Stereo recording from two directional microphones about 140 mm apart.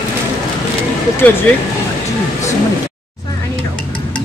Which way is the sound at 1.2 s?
10° left (ahead or behind).